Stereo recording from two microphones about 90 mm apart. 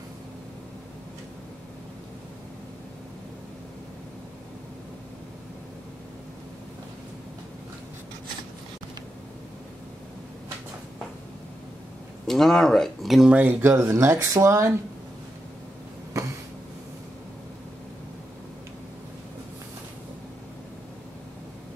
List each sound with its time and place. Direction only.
12.3 s speech: 5° left (ahead or behind)
13.4 s speech: 20° right (ahead or behind); by 14.7 s 35° right (ahead or behind)
16.1 s a sound: 40° right (ahead or behind)